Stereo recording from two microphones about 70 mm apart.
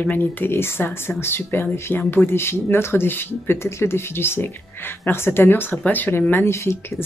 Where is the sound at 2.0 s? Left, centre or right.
Left.